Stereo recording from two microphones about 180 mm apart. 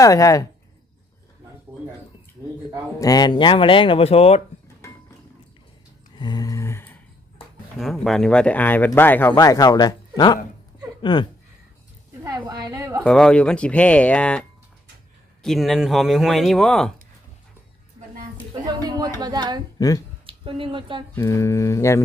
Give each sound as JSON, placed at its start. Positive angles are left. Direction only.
{"t": 0.0, "sound": "speech", "side_deg": 20}
{"t": 3.0, "sound": "speech", "side_deg": 20}
{"t": 6.1, "sound": "a sound", "side_deg": 25}
{"t": 7.8, "sound": "speech", "side_deg": 0}
{"t": 12.2, "sound": "a woman's voice", "side_deg": -20}
{"t": 13.0, "sound": "speech", "side_deg": 5}
{"t": 15.4, "sound": "speech", "side_deg": 0}
{"t": 18.6, "sound": "a sound", "side_deg": -25}
{"t": 19.2, "sound": "a woman's voice", "side_deg": -20}
{"t": 21.1, "sound": "speech", "side_deg": 15}